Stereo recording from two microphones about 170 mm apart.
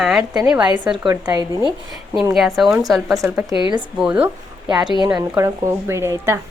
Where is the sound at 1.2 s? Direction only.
20° right (ahead or behind).